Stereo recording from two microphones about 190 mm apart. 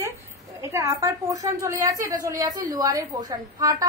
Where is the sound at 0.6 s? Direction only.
15° right (ahead or behind).